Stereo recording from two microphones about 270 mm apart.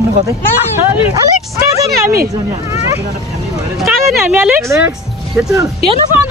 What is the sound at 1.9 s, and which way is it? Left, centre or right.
Speech, right.